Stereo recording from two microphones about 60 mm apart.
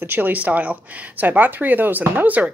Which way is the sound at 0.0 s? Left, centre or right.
Right.